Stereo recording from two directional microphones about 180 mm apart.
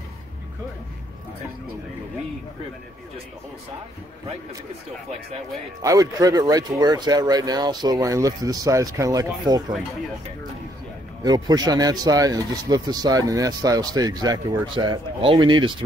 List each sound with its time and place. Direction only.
5.8 s speech: 20° right (ahead or behind)
11.2 s speech: 20° right (ahead or behind)